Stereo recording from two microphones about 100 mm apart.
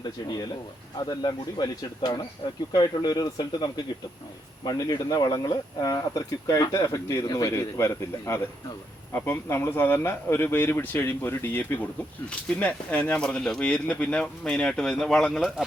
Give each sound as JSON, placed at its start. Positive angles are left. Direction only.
{"t": 0.3, "sound": "speech", "side_deg": 45}